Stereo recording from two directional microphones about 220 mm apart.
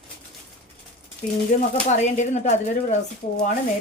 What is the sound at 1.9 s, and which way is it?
Speech, 30° left (ahead or behind).